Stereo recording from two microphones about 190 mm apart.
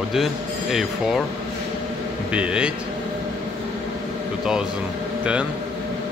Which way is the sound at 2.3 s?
5° right (ahead or behind).